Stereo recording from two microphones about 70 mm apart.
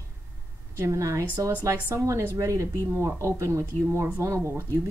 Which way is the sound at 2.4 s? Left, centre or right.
Right.